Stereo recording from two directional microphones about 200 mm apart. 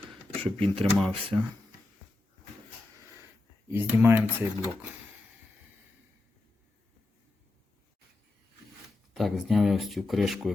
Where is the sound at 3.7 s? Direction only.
10° right (ahead or behind).